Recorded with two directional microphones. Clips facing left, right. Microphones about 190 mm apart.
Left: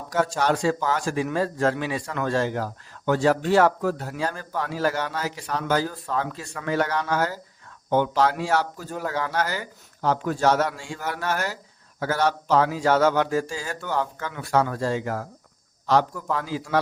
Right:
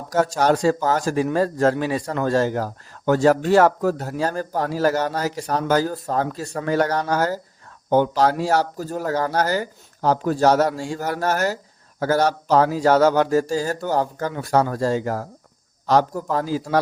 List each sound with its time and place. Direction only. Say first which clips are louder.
0.1 s speech: right 4 dB; 40° right (ahead or behind)